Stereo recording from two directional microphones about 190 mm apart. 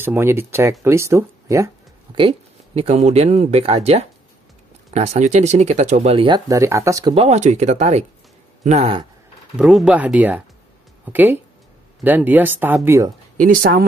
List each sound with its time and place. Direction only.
0.0 s speech: 10° right (ahead or behind)
2.1 s speech: 30° right (ahead or behind)
7.2 s speech: 35° right (ahead or behind)
9.6 s speech: 5° right (ahead or behind)
13.4 s speech: 45° right (ahead or behind)